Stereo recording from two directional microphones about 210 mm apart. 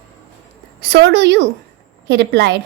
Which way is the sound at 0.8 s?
55° right (ahead or behind).